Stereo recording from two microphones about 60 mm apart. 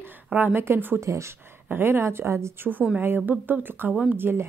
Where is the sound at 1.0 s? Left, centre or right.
Right.